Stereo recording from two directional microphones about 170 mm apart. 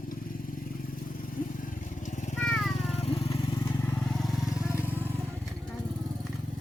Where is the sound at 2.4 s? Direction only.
5° left (ahead or behind).